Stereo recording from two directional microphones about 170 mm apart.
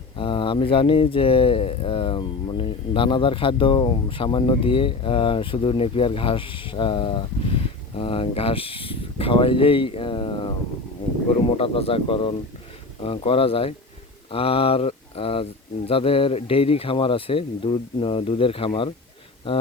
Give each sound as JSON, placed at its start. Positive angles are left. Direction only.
{"t": 0.2, "sound": "speech", "side_deg": 30}
{"t": 11.5, "sound": "speech", "side_deg": 35}
{"t": 14.3, "sound": "mantra", "side_deg": 35}
{"t": 15.9, "sound": "speech", "side_deg": 35}